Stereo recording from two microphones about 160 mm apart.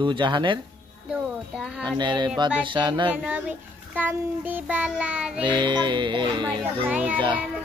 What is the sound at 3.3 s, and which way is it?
Child singing, 10° right (ahead or behind).